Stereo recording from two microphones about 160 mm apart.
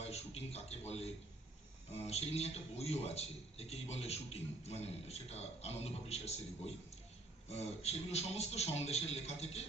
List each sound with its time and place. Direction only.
0.0 s a sound: 40° left (ahead or behind)
2.0 s a man's voice: 40° left (ahead or behind)
7.4 s a man's voice: 45° left (ahead or behind)